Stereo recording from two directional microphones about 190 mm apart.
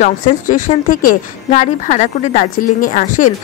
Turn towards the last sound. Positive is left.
turn(degrees=45)  # may be behind; listen again after turning